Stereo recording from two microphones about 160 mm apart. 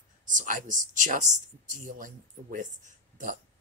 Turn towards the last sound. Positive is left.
turn(degrees=-55)  # may be behind; listen again after turning